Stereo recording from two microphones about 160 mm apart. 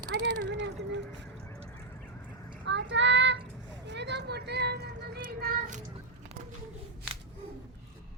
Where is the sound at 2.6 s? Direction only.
90° right.